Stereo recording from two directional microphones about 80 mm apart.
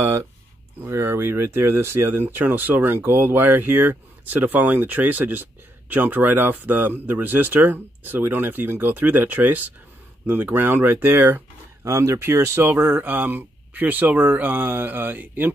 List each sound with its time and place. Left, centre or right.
0.0 s a sound: right
0.8 s speech: right
11.8 s speech: right